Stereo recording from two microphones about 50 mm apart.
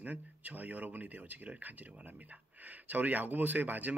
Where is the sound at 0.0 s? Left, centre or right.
Right.